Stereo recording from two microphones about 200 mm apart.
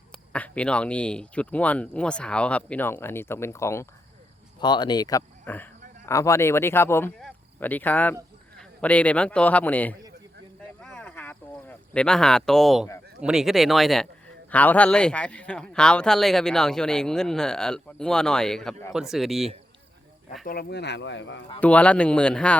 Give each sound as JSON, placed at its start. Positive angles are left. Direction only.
{"t": 0.3, "sound": "speech", "side_deg": 5}
{"t": 7.2, "sound": "a sound", "side_deg": 5}
{"t": 8.5, "sound": "a man's voice", "side_deg": 5}
{"t": 10.8, "sound": "a sound", "side_deg": 5}
{"t": 13.2, "sound": "speech", "side_deg": 0}
{"t": 20.4, "sound": "speech", "side_deg": 50}
{"t": 21.6, "sound": "speech", "side_deg": 5}